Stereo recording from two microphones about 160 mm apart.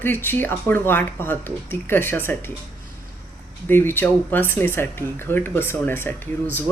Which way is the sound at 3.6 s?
15° left (ahead or behind).